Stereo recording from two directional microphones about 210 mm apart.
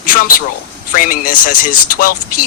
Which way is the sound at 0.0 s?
40° left (ahead or behind).